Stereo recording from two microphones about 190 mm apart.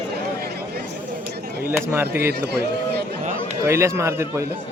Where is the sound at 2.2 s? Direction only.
55° right (ahead or behind).